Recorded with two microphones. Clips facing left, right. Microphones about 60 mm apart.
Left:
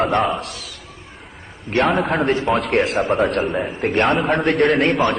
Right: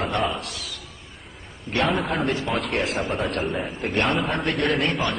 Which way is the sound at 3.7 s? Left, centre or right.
Left.